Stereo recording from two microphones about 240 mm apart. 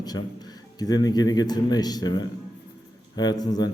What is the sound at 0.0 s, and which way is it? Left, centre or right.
Speech, centre.